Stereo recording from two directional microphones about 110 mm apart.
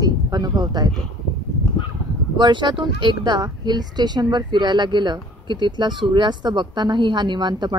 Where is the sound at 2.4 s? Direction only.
45° right (ahead or behind).